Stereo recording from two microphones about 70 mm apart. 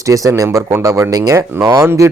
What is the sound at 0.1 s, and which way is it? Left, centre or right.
Speech, right.